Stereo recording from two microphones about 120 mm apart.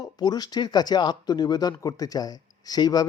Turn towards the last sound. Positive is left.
turn(degrees=35)  # may be behind; listen again after turning